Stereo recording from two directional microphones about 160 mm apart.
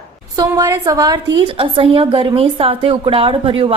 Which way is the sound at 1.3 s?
35° right (ahead or behind).